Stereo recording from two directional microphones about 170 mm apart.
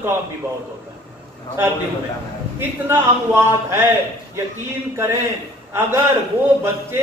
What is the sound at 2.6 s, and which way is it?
A man's voice, 15° right (ahead or behind).